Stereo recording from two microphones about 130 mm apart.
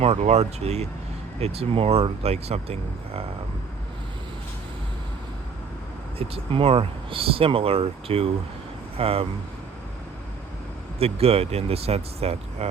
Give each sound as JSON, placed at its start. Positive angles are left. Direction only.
{"t": 0.0, "sound": "speech", "side_deg": -55}
{"t": 6.1, "sound": "speech", "side_deg": -45}
{"t": 11.0, "sound": "speech", "side_deg": -50}